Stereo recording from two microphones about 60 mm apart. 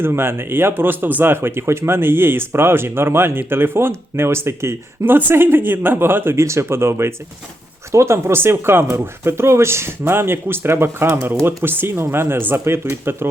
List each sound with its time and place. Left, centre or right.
0.0 s speech: right
6.4 s speech: right